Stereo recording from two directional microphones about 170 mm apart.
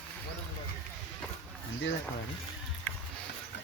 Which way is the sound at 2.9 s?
10° left (ahead or behind).